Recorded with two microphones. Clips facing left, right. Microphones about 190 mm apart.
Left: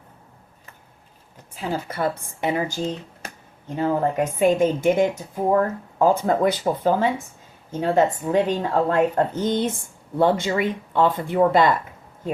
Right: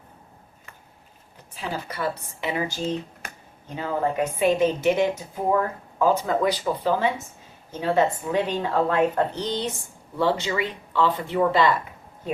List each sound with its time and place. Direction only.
1.9 s speech: 50° left (ahead or behind)
3.8 s speech: 45° left (ahead or behind)